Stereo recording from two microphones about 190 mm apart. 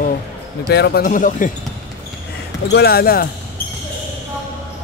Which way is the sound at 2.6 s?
55° left (ahead or behind).